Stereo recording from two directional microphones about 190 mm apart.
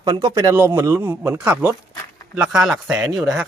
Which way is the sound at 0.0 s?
20° right (ahead or behind).